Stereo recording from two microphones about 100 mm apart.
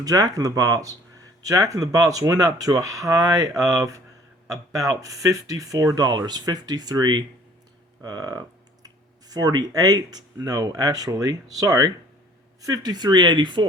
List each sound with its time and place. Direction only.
0.0 s speech: 35° right (ahead or behind)
8.0 s a sound: 40° right (ahead or behind)
9.3 s speech: 40° right (ahead or behind)